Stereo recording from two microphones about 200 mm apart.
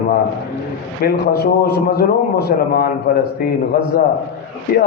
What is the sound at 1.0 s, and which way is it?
A man's voice, 55° left (ahead or behind).